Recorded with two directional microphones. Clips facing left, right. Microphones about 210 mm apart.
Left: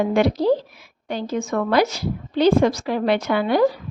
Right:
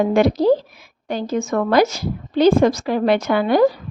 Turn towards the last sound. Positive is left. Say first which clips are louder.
# right 3 dB
turn(degrees=-45)  # may be behind; listen again after turning